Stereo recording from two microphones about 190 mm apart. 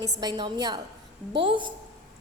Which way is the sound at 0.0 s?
20° right (ahead or behind).